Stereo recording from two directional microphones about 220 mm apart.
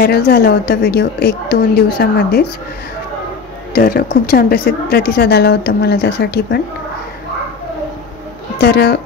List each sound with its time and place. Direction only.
0.0 s speech: 45° left (ahead or behind)
3.7 s speech: 45° left (ahead or behind)
8.5 s speech: 45° left (ahead or behind)